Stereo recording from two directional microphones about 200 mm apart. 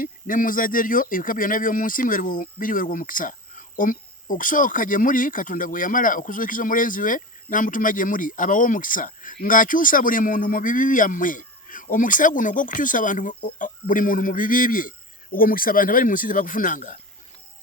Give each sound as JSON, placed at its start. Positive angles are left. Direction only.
{"t": 0.0, "sound": "speech", "side_deg": 45}